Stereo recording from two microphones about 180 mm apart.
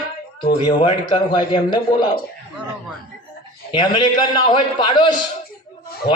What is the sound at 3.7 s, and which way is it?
A man's voice, 25° left (ahead or behind).